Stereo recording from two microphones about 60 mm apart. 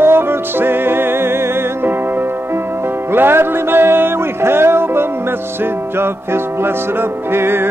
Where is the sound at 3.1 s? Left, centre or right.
Right.